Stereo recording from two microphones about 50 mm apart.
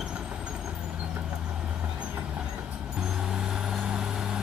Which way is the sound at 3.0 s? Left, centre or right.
Centre.